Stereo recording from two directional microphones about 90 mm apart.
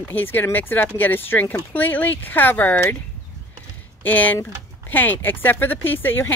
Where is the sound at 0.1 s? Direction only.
20° left (ahead or behind).